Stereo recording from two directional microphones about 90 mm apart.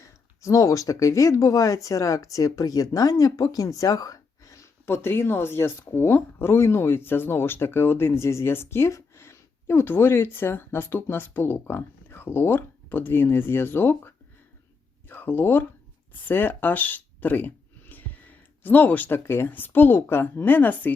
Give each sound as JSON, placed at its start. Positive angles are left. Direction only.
{"t": 0.0, "sound": "speech", "side_deg": 35}
{"t": 15.1, "sound": "speech", "side_deg": 20}